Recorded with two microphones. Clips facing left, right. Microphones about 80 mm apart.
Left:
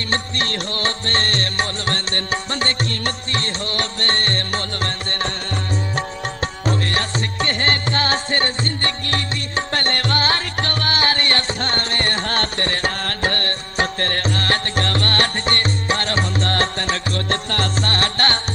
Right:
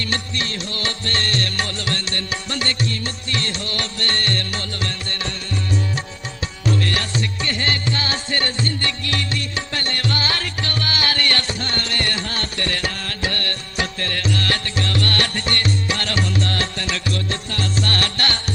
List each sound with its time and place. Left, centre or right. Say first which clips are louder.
0.1 s music: left 3 dB; left
12.2 s music: left 4 dB; left
17.8 s music: left 3 dB; left